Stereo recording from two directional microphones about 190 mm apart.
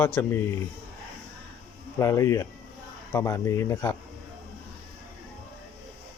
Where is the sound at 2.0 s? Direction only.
15° left (ahead or behind).